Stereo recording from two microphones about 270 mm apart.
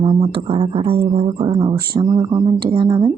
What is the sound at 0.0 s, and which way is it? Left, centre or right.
Speech, centre.